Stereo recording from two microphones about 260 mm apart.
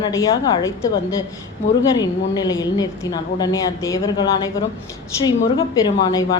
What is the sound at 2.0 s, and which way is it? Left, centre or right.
A woman's voice, centre.